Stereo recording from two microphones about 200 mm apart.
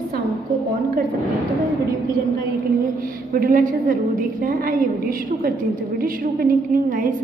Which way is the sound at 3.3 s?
45° right (ahead or behind).